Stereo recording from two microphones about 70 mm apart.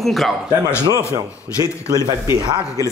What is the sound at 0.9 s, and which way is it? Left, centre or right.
A man's voice, right.